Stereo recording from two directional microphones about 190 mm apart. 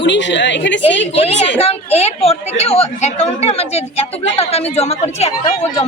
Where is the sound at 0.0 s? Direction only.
70° left (ahead or behind).